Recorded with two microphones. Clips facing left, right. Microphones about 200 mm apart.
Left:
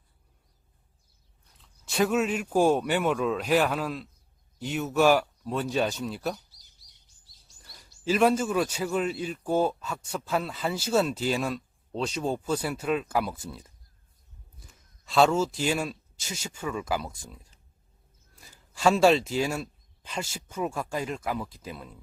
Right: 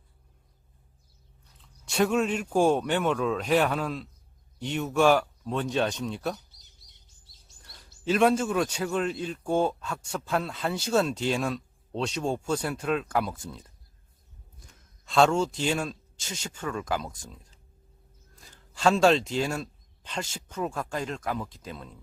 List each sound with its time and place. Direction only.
1.5 s a man's voice: centre (ahead or behind)
6.5 s chirp: 20° right (ahead or behind)
7.6 s a sound: centre (ahead or behind)
8.0 s a man's voice: centre (ahead or behind)